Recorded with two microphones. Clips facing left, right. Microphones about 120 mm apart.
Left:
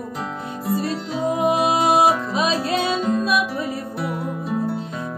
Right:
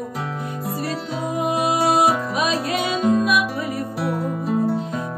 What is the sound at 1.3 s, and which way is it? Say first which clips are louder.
Music: left 1 dB; 25° left (ahead or behind).